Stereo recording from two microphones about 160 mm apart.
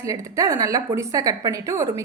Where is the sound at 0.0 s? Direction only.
20° right (ahead or behind).